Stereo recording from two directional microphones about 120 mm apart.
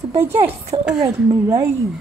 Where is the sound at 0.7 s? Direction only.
40° right (ahead or behind).